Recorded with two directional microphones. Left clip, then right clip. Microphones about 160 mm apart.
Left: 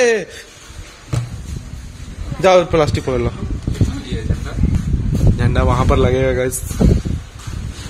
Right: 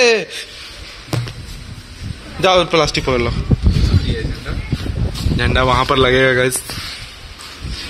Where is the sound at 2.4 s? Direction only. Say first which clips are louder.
Left 1 dB; 10° left (ahead or behind).